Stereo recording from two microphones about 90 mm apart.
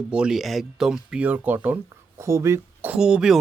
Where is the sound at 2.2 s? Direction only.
30° right (ahead or behind).